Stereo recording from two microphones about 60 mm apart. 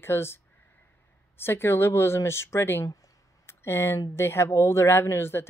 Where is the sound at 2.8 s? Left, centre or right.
Left.